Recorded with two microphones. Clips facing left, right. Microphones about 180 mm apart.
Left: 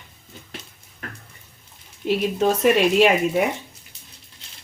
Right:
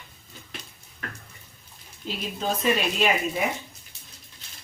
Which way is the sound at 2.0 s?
70° left (ahead or behind).